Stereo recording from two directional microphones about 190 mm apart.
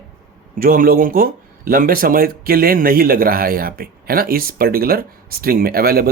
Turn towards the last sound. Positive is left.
turn(degrees=-50)  # may be behind; listen again after turning